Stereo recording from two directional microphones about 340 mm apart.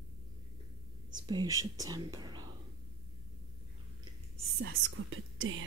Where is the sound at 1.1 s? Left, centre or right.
Centre.